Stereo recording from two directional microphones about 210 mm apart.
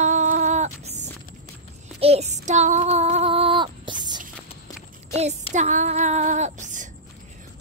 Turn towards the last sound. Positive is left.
turn(degrees=-35)  # may be behind; listen again after turning